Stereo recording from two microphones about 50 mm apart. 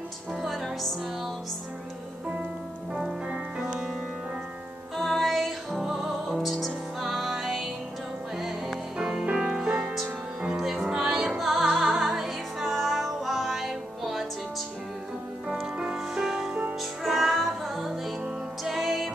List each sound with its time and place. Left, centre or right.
0.3 s music: centre
2.9 s music: centre
4.9 s music: centre
9.5 s music: centre
15.6 s music: centre